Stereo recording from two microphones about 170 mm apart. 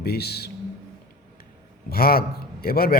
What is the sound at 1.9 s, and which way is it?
A man's voice, 60° left (ahead or behind).